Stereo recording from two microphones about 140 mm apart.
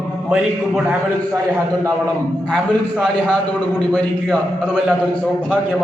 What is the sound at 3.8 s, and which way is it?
Speech, 10° left (ahead or behind).